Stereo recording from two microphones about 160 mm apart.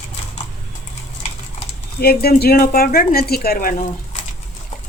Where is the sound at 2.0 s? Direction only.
75° left (ahead or behind); by 4.2 s 60° left (ahead or behind).